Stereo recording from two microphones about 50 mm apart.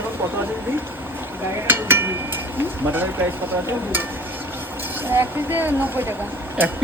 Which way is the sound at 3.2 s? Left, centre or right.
Right.